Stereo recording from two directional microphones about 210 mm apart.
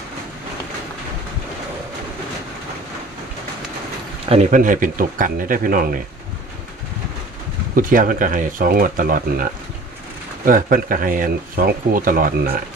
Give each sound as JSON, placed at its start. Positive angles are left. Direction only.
{"t": 4.3, "sound": "speech", "side_deg": -40}
{"t": 7.8, "sound": "speech", "side_deg": -40}